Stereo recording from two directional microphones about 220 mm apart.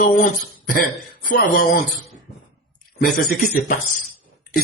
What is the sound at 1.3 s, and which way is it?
Speech, 40° left (ahead or behind).